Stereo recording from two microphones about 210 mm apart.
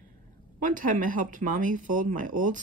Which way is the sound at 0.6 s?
40° right (ahead or behind).